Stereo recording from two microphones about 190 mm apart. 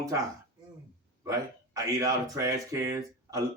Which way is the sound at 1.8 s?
20° right (ahead or behind).